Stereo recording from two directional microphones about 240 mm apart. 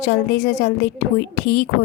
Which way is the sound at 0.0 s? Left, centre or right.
Left.